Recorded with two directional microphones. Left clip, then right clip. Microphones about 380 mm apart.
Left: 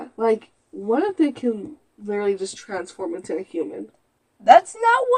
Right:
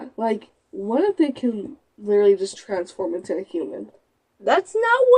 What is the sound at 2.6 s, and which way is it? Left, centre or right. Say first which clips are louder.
Speech: right 3 dB; left.